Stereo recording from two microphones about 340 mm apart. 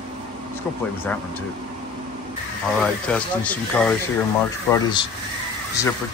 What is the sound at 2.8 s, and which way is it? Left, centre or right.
Speech, centre.